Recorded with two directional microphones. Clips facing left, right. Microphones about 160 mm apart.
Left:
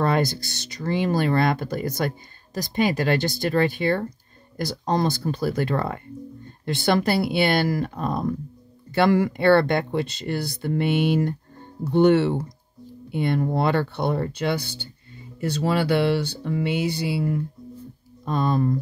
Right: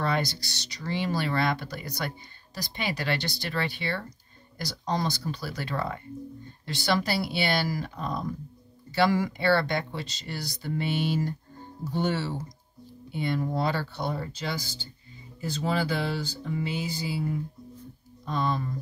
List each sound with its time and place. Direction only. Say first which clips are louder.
0.0 s speech: left 6 dB; 50° left (ahead or behind); by 17.4 s 70° left (ahead or behind)
18.2 s speech: left 7 dB; 50° left (ahead or behind)